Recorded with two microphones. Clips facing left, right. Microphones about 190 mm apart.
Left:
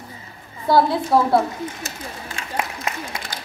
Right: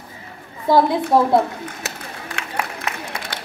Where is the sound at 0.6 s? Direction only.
15° right (ahead or behind).